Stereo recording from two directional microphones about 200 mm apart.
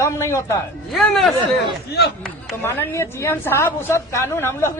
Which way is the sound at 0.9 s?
Centre (ahead or behind).